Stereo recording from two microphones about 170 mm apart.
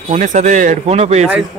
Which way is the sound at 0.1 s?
45° right (ahead or behind).